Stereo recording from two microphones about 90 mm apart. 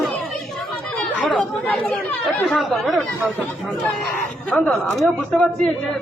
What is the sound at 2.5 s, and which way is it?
Speech, centre (ahead or behind).